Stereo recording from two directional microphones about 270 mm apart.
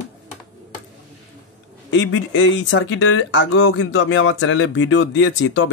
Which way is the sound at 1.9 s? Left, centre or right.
Left.